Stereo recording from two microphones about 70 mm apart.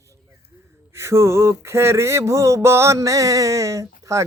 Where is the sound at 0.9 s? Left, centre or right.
Right.